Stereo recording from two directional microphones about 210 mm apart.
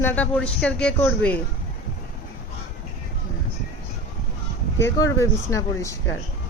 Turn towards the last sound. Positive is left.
turn(degrees=15)  # may be behind; listen again after turning